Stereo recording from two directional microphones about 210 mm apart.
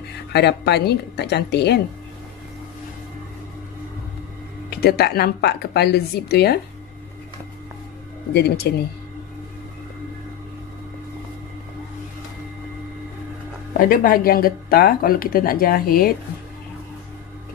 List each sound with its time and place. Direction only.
0.3 s speech: 50° left (ahead or behind)
4.6 s speech: 50° left (ahead or behind)
8.3 s speech: 50° left (ahead or behind)
13.7 s speech: 45° left (ahead or behind)